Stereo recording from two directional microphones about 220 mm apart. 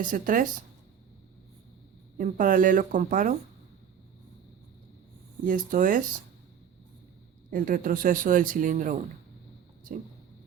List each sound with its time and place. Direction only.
0.0 s speech: 40° right (ahead or behind)
2.1 s speech: 40° right (ahead or behind)
5.5 s speech: 40° right (ahead or behind)
7.5 s speech: 40° right (ahead or behind)